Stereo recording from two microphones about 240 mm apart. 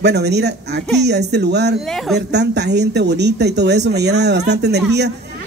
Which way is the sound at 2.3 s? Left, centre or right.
Right.